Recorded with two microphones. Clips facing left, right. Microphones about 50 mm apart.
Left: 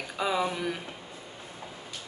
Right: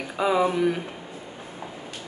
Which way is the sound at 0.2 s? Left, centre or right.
Centre.